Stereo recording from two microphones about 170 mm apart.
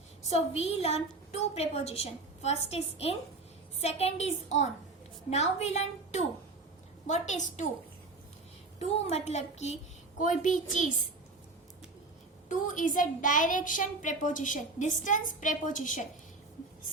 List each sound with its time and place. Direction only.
0.2 s a woman's voice: 40° left (ahead or behind)
8.8 s a woman's voice: 40° left (ahead or behind)
12.5 s a woman's voice: 50° left (ahead or behind)